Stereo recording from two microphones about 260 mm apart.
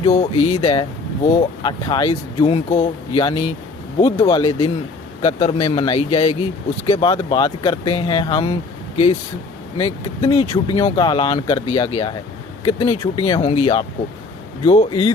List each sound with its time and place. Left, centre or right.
0.0 s speech: left
9.7 s speech: centre